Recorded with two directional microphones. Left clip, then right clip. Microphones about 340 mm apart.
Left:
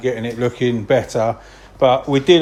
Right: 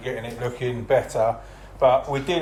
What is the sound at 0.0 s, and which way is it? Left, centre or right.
A man's voice, left.